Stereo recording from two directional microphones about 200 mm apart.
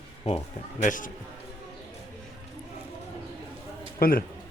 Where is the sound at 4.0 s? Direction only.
45° left (ahead or behind).